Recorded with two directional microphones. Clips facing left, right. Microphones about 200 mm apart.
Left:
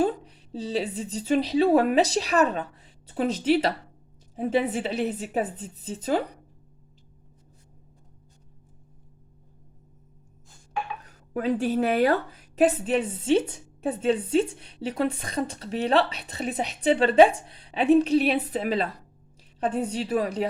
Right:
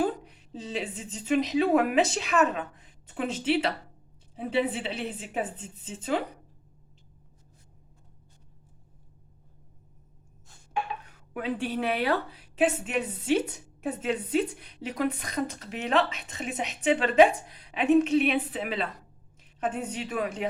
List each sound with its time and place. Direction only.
0.0 s a woman's voice: 30° left (ahead or behind)
11.0 s a woman's voice: 40° left (ahead or behind)